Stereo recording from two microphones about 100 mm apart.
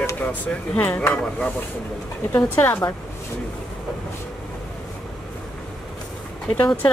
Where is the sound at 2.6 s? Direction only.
25° left (ahead or behind).